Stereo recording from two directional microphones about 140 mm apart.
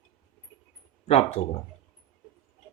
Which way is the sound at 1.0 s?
50° left (ahead or behind).